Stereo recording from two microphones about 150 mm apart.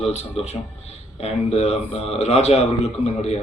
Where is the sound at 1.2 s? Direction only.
40° left (ahead or behind).